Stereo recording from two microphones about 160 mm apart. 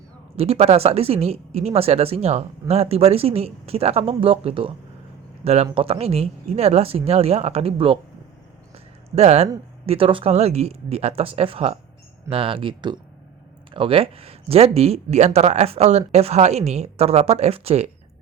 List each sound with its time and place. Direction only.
0.3 s speech: 40° right (ahead or behind)
9.1 s speech: 40° right (ahead or behind)